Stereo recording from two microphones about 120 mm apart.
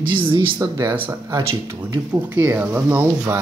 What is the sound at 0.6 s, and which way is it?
Speech, 25° right (ahead or behind).